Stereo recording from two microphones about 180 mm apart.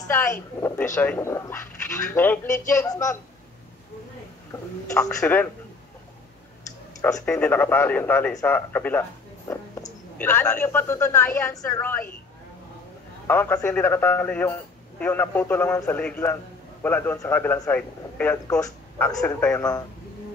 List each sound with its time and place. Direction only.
0.1 s speech: 15° left (ahead or behind)
5.0 s speech: 10° left (ahead or behind)
7.0 s speech: 20° left (ahead or behind)
7.2 s speech: 5° left (ahead or behind)
13.3 s speech: 10° left (ahead or behind)